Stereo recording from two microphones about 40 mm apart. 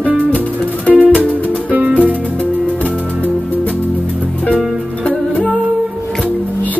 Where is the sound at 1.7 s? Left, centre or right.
Right.